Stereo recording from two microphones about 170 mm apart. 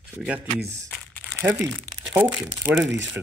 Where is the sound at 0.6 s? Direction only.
15° right (ahead or behind).